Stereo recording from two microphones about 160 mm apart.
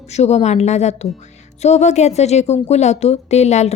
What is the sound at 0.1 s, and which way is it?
Speech, 45° left (ahead or behind).